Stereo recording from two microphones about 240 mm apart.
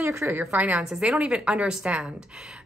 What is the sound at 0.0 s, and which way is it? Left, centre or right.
A woman's voice, centre.